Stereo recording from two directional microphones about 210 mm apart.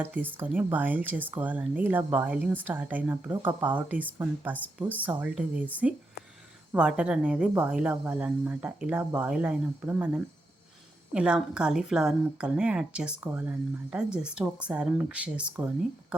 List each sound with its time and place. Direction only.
0.0 s a woman's voice: 10° right (ahead or behind)